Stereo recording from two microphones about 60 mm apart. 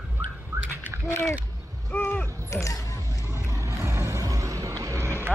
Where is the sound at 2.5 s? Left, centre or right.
Left.